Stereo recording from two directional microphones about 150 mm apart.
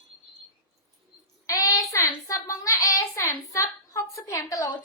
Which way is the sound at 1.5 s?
25° left (ahead or behind).